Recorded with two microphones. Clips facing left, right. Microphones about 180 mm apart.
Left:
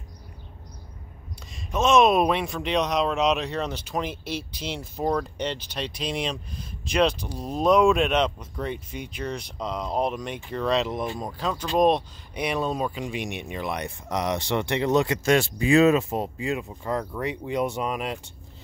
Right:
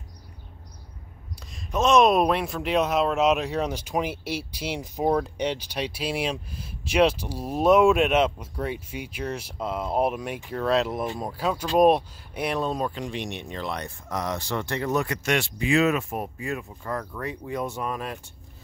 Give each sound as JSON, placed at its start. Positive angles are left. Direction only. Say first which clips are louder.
{"t": 1.5, "sound": "speech", "louder": "even", "side_deg": 0}